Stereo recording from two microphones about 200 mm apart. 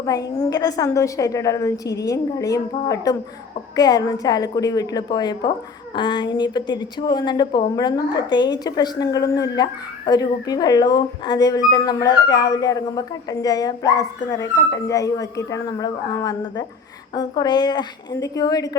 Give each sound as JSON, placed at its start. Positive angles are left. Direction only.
{"t": 0.0, "sound": "a woman's voice", "side_deg": 15}